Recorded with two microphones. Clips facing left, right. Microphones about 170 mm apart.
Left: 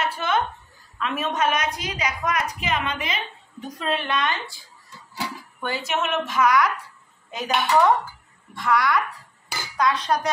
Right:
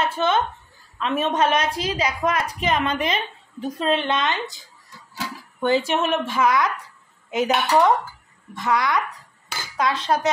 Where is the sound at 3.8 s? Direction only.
25° right (ahead or behind).